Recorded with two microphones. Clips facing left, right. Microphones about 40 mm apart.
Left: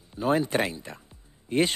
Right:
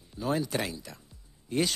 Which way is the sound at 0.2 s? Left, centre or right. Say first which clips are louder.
Left 6 dB; left.